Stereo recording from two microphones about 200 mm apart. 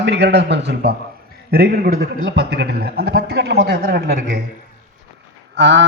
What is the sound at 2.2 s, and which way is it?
A man's voice, 65° right (ahead or behind).